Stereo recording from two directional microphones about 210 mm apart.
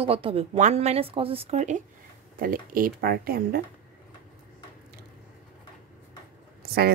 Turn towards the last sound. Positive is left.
turn(degrees=-45)  # may be behind; listen again after turning